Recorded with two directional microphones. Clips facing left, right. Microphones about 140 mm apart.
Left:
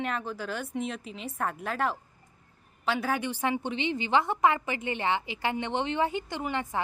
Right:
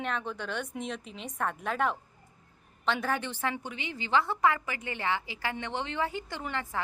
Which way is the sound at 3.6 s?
25° left (ahead or behind).